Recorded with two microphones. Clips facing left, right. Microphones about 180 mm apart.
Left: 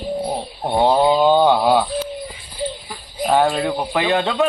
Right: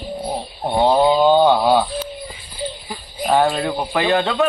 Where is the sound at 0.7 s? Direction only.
10° left (ahead or behind).